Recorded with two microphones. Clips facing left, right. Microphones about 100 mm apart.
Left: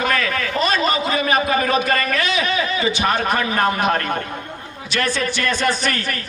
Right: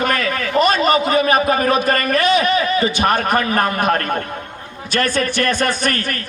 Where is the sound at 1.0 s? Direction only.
35° right (ahead or behind).